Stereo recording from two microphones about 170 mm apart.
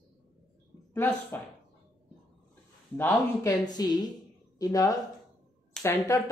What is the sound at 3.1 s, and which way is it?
Speech, 25° left (ahead or behind).